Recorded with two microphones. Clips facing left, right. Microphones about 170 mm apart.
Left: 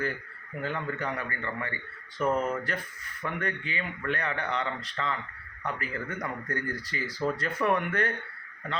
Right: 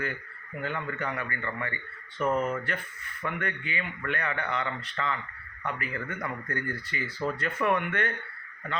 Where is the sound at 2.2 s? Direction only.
5° right (ahead or behind).